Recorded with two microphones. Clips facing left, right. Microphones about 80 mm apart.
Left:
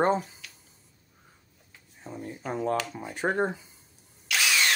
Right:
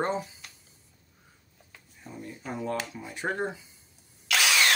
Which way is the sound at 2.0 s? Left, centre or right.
Left.